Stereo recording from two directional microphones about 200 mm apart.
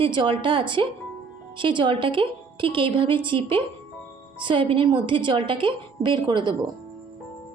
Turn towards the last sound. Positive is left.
turn(degrees=-25)  # may be behind; listen again after turning